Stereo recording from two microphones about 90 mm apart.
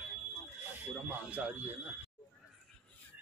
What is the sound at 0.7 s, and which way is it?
Speech, 20° right (ahead or behind).